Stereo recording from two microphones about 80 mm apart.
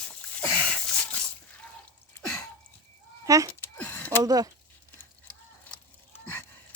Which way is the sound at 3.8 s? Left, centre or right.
Left.